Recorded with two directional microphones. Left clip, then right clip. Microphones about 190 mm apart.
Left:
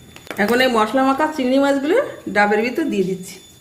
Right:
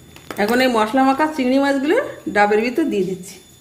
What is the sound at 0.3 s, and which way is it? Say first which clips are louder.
A woman's voice: left 1 dB; 45° right (ahead or behind).